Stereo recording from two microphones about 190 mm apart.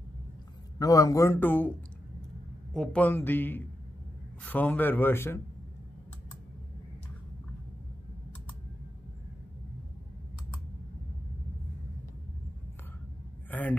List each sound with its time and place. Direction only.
0.7 s a man's voice: 20° left (ahead or behind)
2.7 s a man's voice: 5° left (ahead or behind)
13.5 s a sound: 10° left (ahead or behind)